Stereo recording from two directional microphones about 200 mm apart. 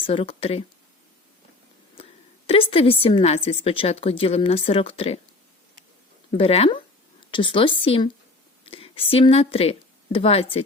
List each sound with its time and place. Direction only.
0.0 s a woman's voice: 25° left (ahead or behind)
2.5 s a woman's voice: 30° left (ahead or behind)
6.3 s a woman's voice: 30° left (ahead or behind)